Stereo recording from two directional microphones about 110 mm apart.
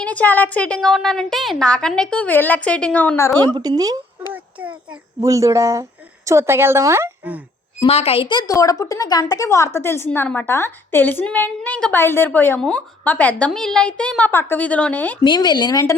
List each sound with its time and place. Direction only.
0.0 s a woman's voice: 15° left (ahead or behind)
3.3 s speech: 40° right (ahead or behind)
5.2 s speech: 30° right (ahead or behind)
7.9 s a woman's voice: 65° left (ahead or behind); by 8.4 s 45° left (ahead or behind)
8.4 s a woman's voice: 30° left (ahead or behind); by 15.2 s 15° left (ahead or behind)
15.2 s speech: 40° left (ahead or behind)